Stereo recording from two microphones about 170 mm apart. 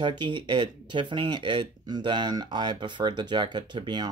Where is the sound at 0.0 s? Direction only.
30° right (ahead or behind).